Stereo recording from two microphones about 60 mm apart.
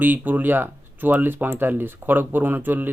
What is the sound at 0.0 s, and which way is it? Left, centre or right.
Speech, right.